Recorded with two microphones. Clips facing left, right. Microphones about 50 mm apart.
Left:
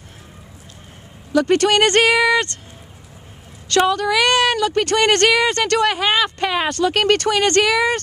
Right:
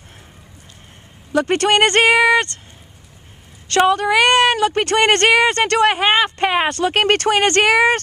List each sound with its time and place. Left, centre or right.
1.3 s a woman's voice: right
3.7 s a woman's voice: right